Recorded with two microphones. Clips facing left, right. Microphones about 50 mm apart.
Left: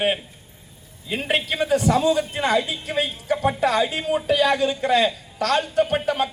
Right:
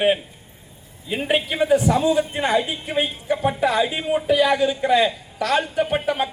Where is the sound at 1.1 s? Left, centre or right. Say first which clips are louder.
Right 2 dB; centre.